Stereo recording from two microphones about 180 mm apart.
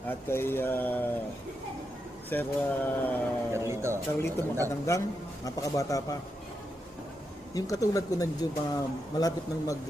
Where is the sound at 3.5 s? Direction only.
15° right (ahead or behind).